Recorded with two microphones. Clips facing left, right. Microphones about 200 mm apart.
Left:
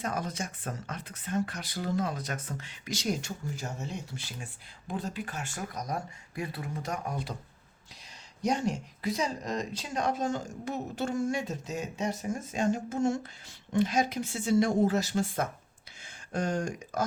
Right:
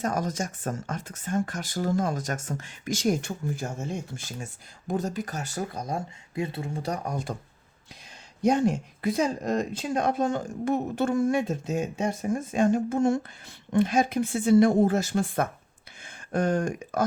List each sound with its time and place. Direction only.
0.0 s speech: 45° right (ahead or behind)
8.4 s speech: 55° right (ahead or behind)